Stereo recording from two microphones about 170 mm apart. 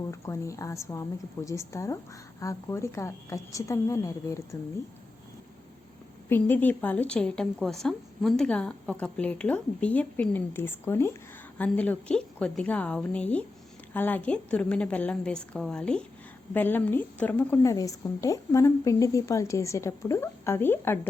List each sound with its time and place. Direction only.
0.1 s a woman's voice: 15° left (ahead or behind)
6.2 s a woman's voice: 10° left (ahead or behind)